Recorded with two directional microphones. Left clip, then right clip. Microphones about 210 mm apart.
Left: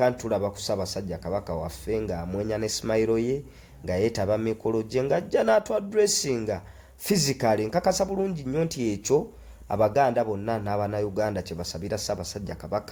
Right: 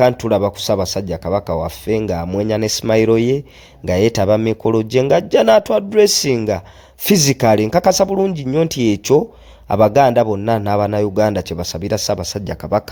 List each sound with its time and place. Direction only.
0.0 s speech: 40° right (ahead or behind)